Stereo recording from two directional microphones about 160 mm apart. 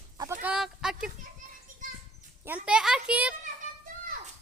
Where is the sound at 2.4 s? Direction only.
10° right (ahead or behind).